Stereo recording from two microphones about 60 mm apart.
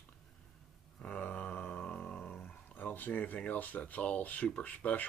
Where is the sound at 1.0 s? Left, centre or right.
Left.